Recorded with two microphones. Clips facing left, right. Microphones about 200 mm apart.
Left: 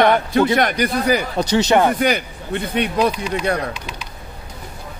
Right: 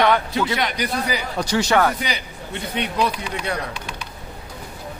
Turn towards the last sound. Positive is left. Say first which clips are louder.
# left 6 dB
turn(degrees=45)  # may be behind; listen again after turning